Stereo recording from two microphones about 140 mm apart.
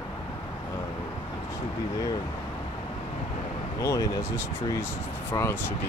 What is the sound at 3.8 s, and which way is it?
Speech, 25° left (ahead or behind).